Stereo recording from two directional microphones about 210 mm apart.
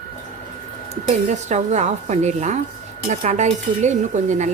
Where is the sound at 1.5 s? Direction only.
35° right (ahead or behind).